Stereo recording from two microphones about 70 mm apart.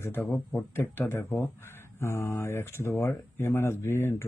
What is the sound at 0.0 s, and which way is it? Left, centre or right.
Speech, left.